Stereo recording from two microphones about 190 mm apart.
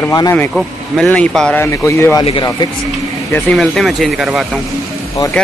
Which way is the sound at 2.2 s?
25° left (ahead or behind).